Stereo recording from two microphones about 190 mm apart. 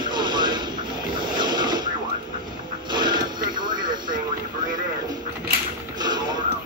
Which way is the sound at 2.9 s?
25° right (ahead or behind).